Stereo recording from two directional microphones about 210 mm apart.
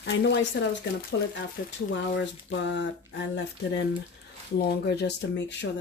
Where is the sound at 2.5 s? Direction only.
60° left (ahead or behind).